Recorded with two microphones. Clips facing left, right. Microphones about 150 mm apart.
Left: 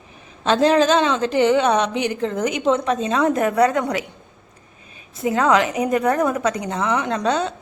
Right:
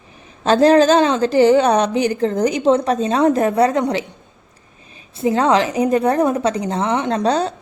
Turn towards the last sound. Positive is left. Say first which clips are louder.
# right 3 dB
turn(degrees=-35)  # may be behind; listen again after turning